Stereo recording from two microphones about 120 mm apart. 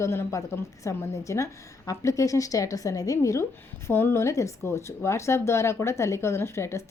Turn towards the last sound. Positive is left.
turn(degrees=20)  # may be behind; listen again after turning